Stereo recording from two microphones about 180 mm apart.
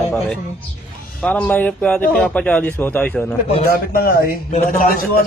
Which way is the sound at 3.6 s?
55° left (ahead or behind).